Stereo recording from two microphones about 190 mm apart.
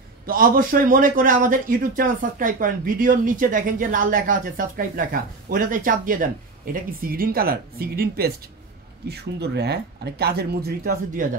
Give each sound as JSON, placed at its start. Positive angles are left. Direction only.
{"t": 0.3, "sound": "speech", "side_deg": -45}